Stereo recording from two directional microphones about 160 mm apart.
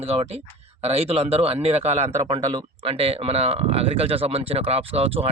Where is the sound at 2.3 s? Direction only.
25° right (ahead or behind).